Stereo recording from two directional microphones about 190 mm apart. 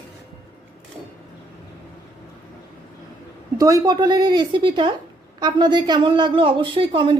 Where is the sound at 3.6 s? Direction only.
20° right (ahead or behind).